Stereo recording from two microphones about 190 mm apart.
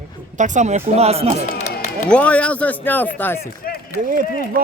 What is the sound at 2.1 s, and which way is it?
A man's voice, 5° left (ahead or behind).